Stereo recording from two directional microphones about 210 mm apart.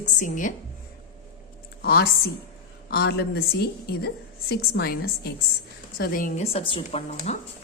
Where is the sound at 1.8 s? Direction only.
45° left (ahead or behind).